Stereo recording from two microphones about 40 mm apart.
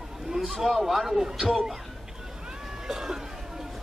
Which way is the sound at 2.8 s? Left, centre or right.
Centre.